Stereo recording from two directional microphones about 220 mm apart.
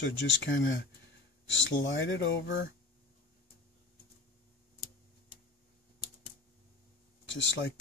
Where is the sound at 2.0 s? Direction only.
60° left (ahead or behind).